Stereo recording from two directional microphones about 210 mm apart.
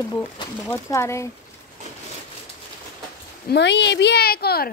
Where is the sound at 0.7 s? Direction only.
15° left (ahead or behind).